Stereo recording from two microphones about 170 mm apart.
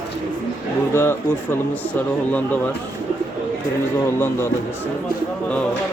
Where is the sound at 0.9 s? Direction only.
15° left (ahead or behind).